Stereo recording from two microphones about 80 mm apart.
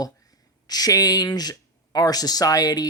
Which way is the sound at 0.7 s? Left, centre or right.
Left.